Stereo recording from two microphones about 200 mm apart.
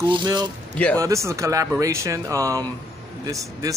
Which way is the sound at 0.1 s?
20° right (ahead or behind).